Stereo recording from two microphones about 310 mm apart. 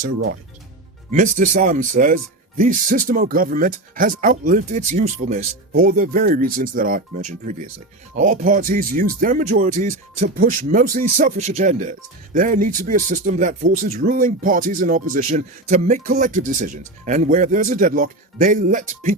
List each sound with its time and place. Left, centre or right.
1.1 s speech: right